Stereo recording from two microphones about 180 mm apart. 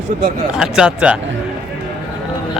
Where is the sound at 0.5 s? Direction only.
5° right (ahead or behind).